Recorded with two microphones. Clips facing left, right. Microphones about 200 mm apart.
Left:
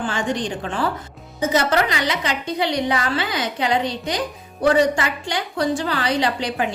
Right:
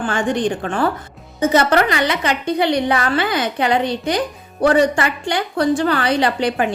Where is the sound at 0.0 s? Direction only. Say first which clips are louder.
Right 5 dB; 55° right (ahead or behind).